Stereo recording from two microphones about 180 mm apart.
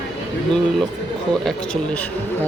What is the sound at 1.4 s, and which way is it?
Speech, 5° left (ahead or behind).